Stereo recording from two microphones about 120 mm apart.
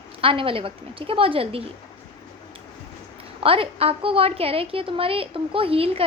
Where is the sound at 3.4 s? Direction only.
50° right (ahead or behind).